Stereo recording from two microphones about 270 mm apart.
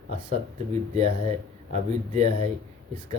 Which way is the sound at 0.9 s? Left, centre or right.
Right.